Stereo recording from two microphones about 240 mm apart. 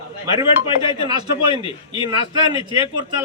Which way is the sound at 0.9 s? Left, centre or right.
Centre.